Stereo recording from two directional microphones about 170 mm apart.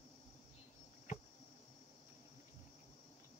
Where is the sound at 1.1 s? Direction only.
50° left (ahead or behind).